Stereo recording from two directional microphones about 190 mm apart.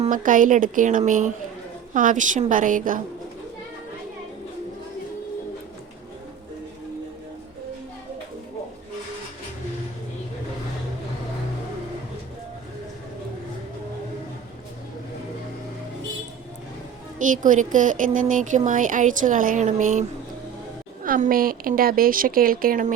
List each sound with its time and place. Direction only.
0.0 s speech: 45° right (ahead or behind)
17.2 s speech: 45° right (ahead or behind)